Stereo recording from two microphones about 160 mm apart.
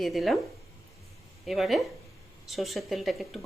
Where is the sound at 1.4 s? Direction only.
Centre (ahead or behind).